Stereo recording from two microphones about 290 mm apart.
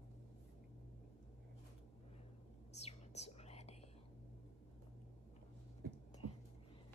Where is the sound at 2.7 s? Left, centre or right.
Left.